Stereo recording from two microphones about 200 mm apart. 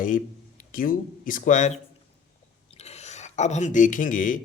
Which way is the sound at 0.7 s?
45° left (ahead or behind).